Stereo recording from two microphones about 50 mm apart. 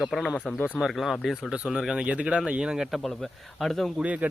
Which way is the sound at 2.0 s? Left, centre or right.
Right.